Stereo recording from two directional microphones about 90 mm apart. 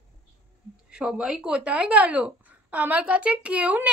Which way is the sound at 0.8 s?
10° right (ahead or behind).